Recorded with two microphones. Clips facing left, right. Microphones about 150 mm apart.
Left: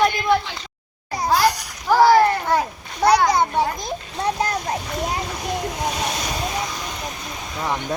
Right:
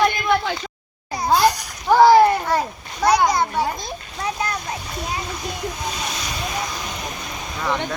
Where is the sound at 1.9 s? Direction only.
20° right (ahead or behind).